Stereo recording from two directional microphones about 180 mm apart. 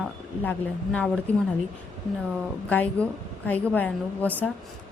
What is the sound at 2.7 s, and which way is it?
Speech, 10° left (ahead or behind).